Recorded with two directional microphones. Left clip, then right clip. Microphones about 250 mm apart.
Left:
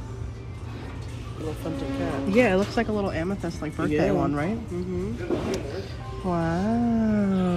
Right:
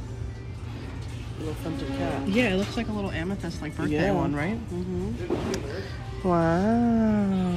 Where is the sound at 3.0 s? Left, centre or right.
Centre.